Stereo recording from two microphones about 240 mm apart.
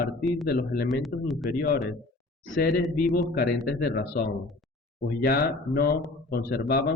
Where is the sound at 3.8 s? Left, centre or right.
Left.